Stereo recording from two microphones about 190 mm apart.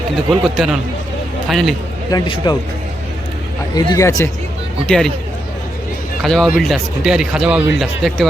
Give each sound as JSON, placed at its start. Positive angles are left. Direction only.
{"t": 0.3, "sound": "speech", "side_deg": 0}
{"t": 2.0, "sound": "speech", "side_deg": 25}
{"t": 3.8, "sound": "speech", "side_deg": 15}
{"t": 4.9, "sound": "speech", "side_deg": 5}
{"t": 6.2, "sound": "speech", "side_deg": 0}